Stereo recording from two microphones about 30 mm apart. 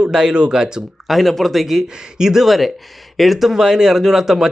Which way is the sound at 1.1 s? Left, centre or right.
Centre.